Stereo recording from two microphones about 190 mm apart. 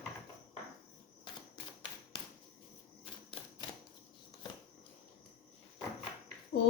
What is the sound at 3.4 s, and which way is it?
Typewriter, 30° left (ahead or behind).